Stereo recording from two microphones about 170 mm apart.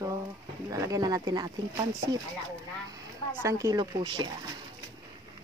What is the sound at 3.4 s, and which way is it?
Speech, 20° right (ahead or behind).